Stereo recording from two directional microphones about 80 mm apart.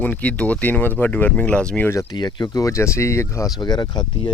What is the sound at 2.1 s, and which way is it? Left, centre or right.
Speech, left.